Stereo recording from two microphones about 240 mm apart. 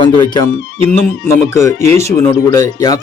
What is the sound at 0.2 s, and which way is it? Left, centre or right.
Speech, centre.